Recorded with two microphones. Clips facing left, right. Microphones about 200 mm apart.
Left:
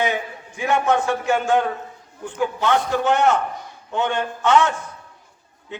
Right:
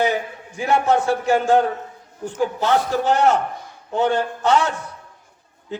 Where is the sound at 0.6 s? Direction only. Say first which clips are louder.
Right 1 dB; 35° right (ahead or behind).